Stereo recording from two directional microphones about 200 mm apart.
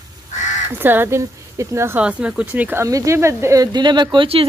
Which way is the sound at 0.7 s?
10° right (ahead or behind).